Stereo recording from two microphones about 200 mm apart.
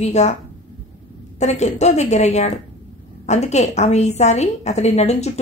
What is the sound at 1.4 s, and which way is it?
A woman's voice, 35° left (ahead or behind).